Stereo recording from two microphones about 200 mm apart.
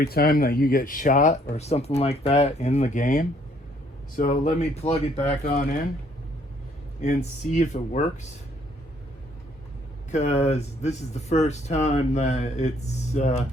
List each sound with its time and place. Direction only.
0.0 s speech: 50° left (ahead or behind)
7.0 s speech: 35° left (ahead or behind)
10.1 s speech: 35° left (ahead or behind)